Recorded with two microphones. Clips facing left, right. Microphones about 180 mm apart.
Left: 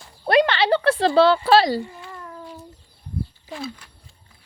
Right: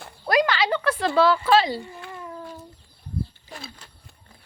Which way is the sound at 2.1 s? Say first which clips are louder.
Right 1 dB; centre (ahead or behind).